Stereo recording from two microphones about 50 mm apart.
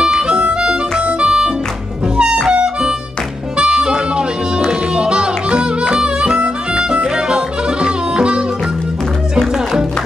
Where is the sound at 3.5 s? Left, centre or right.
Centre.